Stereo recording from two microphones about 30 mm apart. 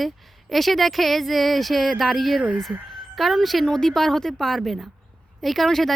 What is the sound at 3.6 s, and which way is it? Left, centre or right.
A woman's voice, centre.